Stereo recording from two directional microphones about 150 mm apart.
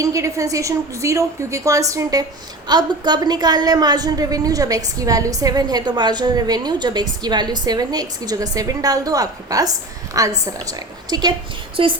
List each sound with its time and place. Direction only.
0.0 s a woman's voice: 20° right (ahead or behind); by 11.9 s 35° right (ahead or behind)